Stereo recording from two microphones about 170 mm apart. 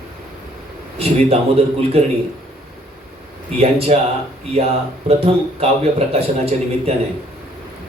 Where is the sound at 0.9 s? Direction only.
35° right (ahead or behind).